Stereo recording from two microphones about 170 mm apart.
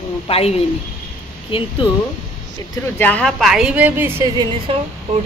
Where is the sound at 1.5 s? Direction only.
30° left (ahead or behind).